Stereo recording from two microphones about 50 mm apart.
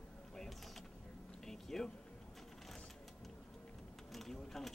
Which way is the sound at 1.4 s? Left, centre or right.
Centre.